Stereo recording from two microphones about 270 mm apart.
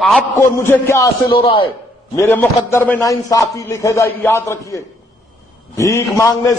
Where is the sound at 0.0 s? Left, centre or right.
Centre.